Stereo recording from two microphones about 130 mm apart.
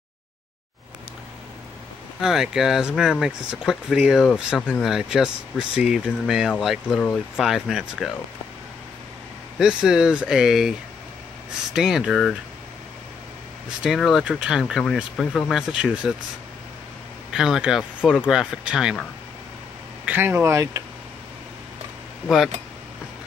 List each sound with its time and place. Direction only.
2.1 s speech: 5° right (ahead or behind)
9.6 s speech: 5° right (ahead or behind)
11.7 s speech: 5° right (ahead or behind)
13.8 s speech: centre (ahead or behind)
17.3 s speech: 5° right (ahead or behind)
20.1 s speech: 15° right (ahead or behind)